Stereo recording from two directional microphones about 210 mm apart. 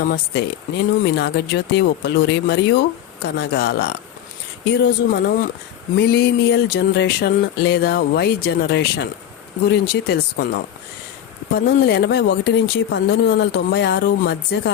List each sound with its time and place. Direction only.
0.0 s speech: 50° left (ahead or behind)